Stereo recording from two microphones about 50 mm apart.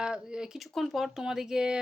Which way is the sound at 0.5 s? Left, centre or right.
Centre.